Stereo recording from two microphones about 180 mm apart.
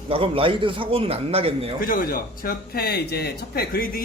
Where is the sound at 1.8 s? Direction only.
50° left (ahead or behind).